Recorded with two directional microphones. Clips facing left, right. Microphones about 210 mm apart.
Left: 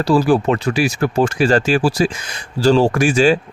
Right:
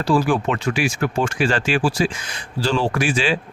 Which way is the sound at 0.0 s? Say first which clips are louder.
Left 4 dB; 40° left (ahead or behind).